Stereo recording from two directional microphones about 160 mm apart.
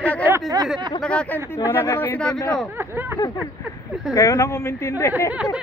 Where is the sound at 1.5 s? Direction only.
20° left (ahead or behind).